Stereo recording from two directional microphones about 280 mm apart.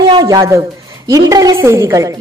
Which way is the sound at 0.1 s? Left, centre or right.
Centre.